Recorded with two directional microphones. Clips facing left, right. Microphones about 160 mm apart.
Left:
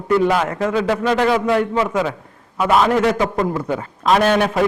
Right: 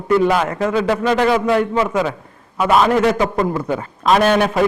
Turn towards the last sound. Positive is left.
turn(degrees=-15)  # may be behind; listen again after turning